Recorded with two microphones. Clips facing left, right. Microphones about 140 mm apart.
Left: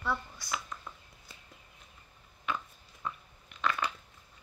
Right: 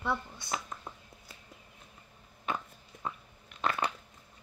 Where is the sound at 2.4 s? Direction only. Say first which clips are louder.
Right 1 dB; 35° right (ahead or behind).